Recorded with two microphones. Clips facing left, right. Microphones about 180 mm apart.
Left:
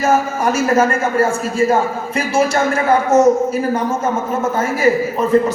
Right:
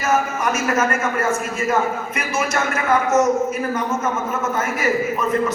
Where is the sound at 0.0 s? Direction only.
30° left (ahead or behind).